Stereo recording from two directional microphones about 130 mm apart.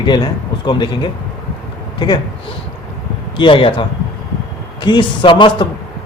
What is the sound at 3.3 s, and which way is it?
Speech, 40° left (ahead or behind).